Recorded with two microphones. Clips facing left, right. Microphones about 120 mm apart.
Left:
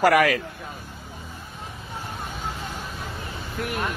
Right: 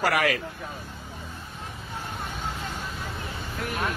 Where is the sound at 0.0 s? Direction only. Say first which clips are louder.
Left 6 dB; 45° left (ahead or behind).